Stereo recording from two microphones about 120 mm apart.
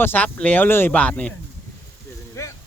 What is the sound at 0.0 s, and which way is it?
Speech, 15° left (ahead or behind).